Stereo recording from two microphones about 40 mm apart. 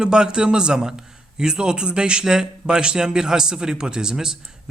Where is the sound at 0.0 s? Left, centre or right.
Right.